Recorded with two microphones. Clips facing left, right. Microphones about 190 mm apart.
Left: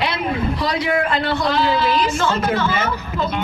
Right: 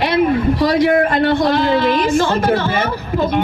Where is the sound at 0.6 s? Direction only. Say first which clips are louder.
Right 8 dB; 50° right (ahead or behind).